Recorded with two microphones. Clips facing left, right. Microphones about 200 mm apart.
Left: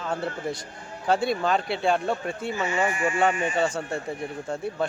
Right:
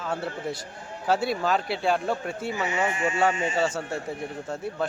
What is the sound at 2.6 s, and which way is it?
Speech, 20° right (ahead or behind).